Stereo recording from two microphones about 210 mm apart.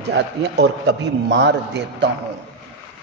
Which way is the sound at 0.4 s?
55° right (ahead or behind).